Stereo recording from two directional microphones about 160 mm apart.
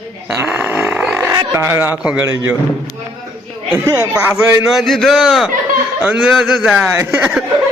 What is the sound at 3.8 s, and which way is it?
Speech, 20° right (ahead or behind).